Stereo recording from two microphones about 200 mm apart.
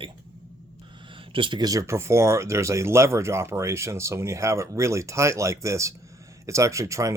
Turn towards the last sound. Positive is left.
turn(degrees=-15)  # may be behind; listen again after turning